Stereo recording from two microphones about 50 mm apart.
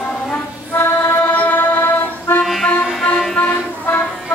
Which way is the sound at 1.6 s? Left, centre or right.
Left.